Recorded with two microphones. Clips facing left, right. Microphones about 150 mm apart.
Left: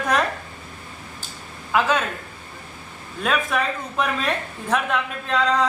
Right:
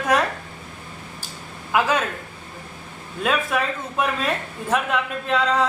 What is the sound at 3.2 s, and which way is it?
Speech, 5° right (ahead or behind).